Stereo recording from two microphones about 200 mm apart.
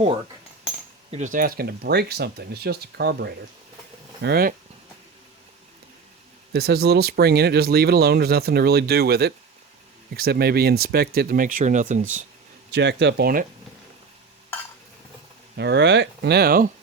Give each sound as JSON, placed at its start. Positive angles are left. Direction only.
{"t": 1.1, "sound": "speech", "side_deg": -40}
{"t": 6.5, "sound": "speech", "side_deg": -50}
{"t": 12.7, "sound": "speech", "side_deg": -60}
{"t": 15.5, "sound": "speech", "side_deg": -60}